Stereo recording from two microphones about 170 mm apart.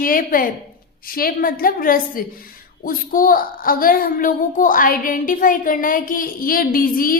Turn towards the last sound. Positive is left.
turn(degrees=55)  # may be behind; listen again after turning